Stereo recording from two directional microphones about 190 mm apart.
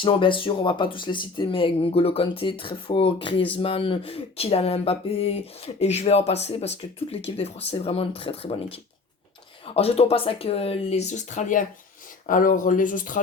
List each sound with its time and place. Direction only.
0.0 s speech: 25° left (ahead or behind)
3.5 s a sound: 30° left (ahead or behind)
12.2 s speech: 45° left (ahead or behind)